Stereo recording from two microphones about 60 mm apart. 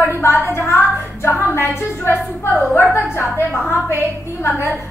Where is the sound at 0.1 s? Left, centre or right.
Left.